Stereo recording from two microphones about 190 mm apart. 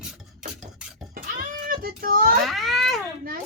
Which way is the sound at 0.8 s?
5° right (ahead or behind).